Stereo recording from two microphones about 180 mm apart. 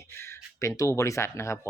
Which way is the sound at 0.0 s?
15° left (ahead or behind).